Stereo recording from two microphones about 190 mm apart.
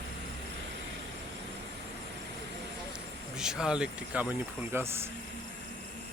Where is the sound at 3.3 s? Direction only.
5° right (ahead or behind).